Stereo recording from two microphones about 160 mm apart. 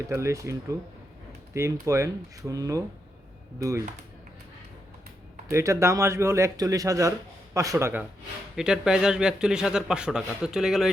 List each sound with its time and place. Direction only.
0.1 s speech: 20° right (ahead or behind)
5.5 s speech: 15° right (ahead or behind)
8.5 s speech: 5° right (ahead or behind)